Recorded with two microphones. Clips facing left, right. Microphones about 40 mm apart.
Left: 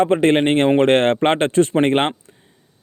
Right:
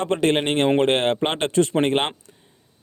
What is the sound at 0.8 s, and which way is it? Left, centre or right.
Speech, left.